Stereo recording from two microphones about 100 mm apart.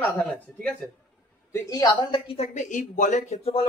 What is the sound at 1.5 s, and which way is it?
Speech, 35° left (ahead or behind).